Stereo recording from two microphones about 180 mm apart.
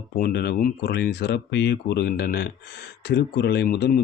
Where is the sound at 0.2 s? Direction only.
60° left (ahead or behind).